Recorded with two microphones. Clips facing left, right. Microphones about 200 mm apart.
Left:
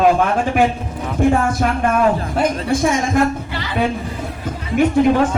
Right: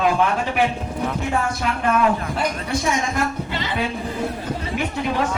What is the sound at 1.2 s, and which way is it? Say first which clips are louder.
A woman's voice: left 13 dB; 50° left (ahead or behind).